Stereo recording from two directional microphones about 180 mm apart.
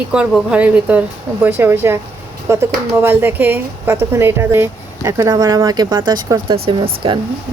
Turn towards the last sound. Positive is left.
turn(degrees=-30)  # may be behind; listen again after turning